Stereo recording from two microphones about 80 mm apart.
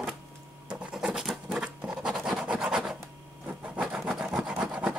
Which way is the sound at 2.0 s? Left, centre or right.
Centre.